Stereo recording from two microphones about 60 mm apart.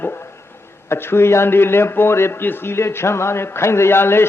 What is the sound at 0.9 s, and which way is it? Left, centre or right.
A man's voice, left.